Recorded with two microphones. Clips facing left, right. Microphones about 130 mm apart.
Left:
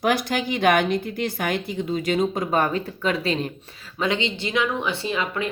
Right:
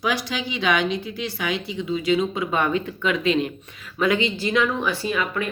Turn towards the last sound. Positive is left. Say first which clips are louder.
# right 1 dB
turn(degrees=25)  # may be behind; listen again after turning